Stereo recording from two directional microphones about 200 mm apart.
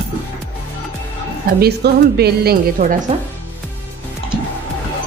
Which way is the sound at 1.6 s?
55° right (ahead or behind).